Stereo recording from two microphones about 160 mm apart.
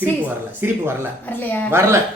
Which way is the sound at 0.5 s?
15° right (ahead or behind).